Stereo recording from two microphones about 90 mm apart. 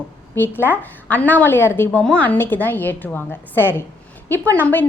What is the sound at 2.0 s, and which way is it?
A woman's voice, 10° left (ahead or behind).